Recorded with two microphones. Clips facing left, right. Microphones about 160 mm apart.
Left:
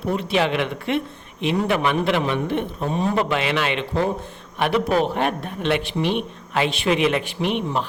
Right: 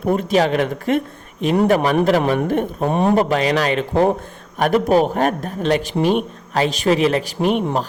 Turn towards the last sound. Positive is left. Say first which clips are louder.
# right 5 dB
turn(degrees=-40)  # may be behind; listen again after turning